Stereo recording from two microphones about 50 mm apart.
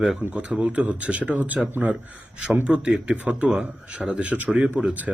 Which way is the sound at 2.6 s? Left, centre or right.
Centre.